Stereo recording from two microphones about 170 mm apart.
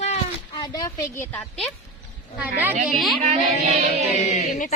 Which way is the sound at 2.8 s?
Centre (ahead or behind).